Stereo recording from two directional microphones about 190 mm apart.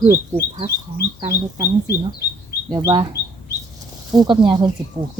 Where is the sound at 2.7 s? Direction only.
20° right (ahead or behind).